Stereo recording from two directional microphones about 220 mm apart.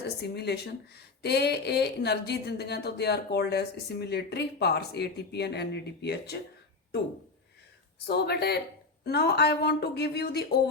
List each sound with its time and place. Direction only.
0.2 s speech: 50° left (ahead or behind)
8.0 s speech: 50° left (ahead or behind)